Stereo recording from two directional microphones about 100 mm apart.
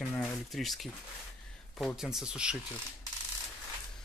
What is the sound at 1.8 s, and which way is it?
Speech, 5° right (ahead or behind).